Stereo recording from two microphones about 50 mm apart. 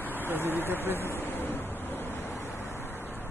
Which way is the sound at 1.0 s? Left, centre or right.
Left.